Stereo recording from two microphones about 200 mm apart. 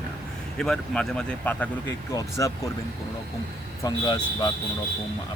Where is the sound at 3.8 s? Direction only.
20° left (ahead or behind).